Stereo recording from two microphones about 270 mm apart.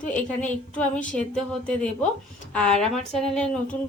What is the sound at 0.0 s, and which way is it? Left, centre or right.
Speech, centre.